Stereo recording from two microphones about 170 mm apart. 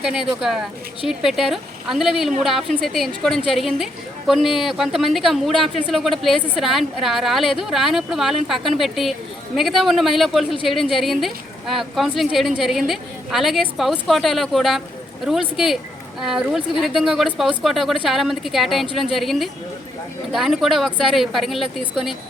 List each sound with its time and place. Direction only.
0.0 s speech: 5° right (ahead or behind)